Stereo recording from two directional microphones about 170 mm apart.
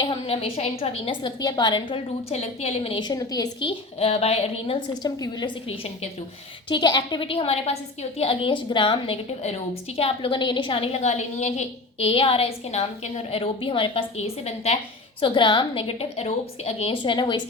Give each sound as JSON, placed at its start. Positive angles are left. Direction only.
{"t": 0.0, "sound": "a woman's voice", "side_deg": 35}
{"t": 2.3, "sound": "a woman's voice", "side_deg": 40}
{"t": 15.2, "sound": "a woman's voice", "side_deg": 25}